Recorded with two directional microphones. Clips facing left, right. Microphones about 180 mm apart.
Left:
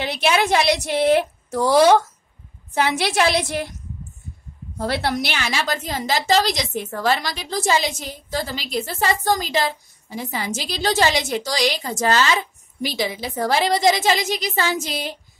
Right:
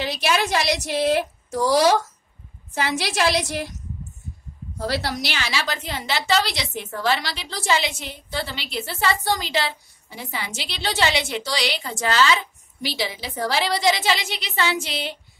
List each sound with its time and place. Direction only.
0.0 s a woman's voice: 55° left (ahead or behind)
4.7 s a woman's voice: 55° left (ahead or behind)